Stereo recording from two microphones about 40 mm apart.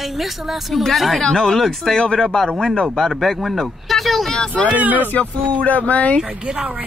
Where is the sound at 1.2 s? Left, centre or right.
Centre.